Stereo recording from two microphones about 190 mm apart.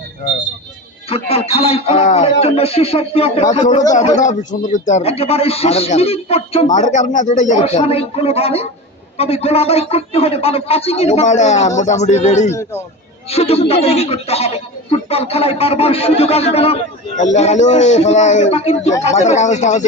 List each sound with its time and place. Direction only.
1.1 s a man's voice: 30° left (ahead or behind)